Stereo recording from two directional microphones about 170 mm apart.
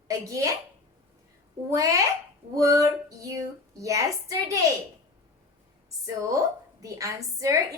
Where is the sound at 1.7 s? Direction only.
20° right (ahead or behind).